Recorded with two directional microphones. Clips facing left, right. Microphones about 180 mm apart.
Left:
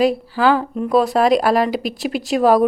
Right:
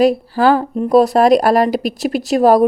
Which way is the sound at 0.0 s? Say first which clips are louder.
Right 3 dB; 40° right (ahead or behind).